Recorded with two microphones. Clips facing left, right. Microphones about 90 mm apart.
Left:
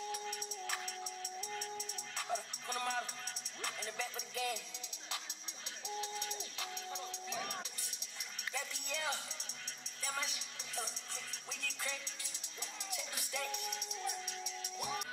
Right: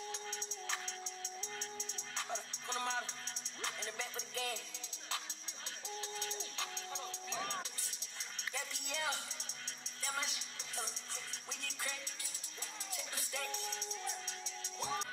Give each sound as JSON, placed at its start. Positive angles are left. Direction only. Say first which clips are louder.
{"t": 0.1, "sound": "music", "louder": "left 3 dB", "side_deg": -25}
{"t": 2.1, "sound": "music", "louder": "left 3 dB", "side_deg": -25}
{"t": 5.9, "sound": "music", "louder": "left 3 dB", "side_deg": -30}
{"t": 11.6, "sound": "music", "louder": "left 2 dB", "side_deg": -35}